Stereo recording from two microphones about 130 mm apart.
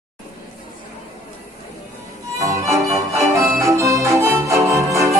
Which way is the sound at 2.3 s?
25° right (ahead or behind).